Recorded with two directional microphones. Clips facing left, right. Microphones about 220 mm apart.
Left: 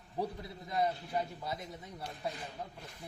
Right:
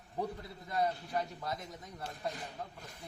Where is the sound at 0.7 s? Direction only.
20° left (ahead or behind).